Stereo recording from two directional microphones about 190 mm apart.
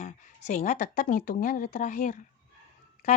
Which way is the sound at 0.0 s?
40° left (ahead or behind).